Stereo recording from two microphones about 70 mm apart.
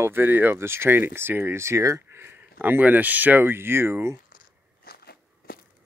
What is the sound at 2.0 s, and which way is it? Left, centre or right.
Speech, right.